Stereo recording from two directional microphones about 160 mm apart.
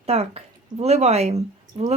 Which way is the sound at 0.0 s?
40° right (ahead or behind).